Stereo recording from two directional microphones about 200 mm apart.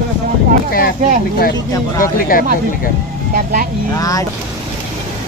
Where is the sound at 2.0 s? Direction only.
45° left (ahead or behind).